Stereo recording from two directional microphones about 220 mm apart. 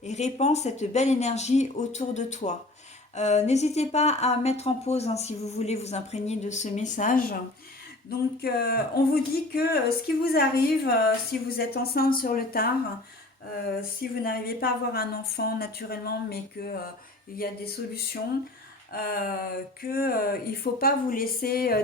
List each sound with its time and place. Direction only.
0.0 s a woman's voice: 30° left (ahead or behind)
14.0 s a woman's voice: 40° left (ahead or behind)
18.9 s speech: 40° left (ahead or behind)